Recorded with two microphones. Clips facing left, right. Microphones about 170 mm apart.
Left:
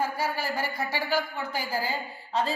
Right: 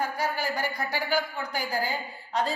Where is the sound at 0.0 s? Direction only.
5° left (ahead or behind).